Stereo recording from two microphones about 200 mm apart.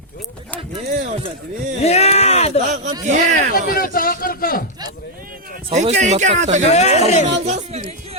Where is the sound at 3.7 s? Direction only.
45° left (ahead or behind).